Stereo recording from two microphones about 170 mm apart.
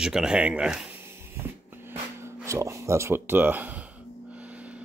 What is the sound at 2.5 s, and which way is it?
Speech, 15° right (ahead or behind).